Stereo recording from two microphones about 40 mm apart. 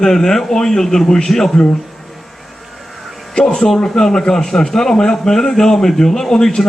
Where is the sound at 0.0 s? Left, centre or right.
Centre.